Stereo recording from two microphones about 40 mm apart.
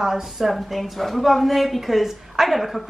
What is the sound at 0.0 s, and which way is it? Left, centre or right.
A woman's voice, centre.